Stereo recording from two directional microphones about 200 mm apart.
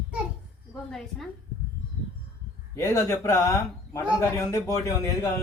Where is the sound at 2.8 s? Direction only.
15° left (ahead or behind).